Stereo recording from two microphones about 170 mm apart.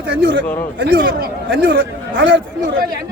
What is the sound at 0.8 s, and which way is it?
Speech, 60° right (ahead or behind).